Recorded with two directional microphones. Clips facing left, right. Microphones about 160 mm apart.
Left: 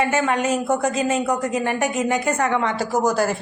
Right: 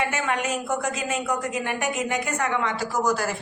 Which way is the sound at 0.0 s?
35° left (ahead or behind).